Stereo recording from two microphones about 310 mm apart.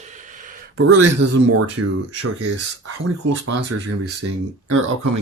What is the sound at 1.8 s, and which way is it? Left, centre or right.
Speech, right.